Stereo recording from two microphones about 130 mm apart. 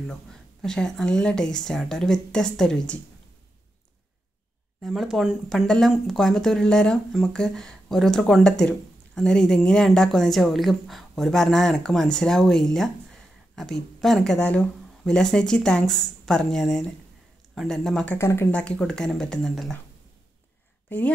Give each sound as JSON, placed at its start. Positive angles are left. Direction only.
{"t": 0.1, "sound": "speech", "side_deg": 5}
{"t": 4.8, "sound": "speech", "side_deg": 0}
{"t": 18.1, "sound": "speech", "side_deg": 20}
{"t": 18.5, "sound": "speech", "side_deg": 10}
{"t": 20.9, "sound": "a woman's voice", "side_deg": 10}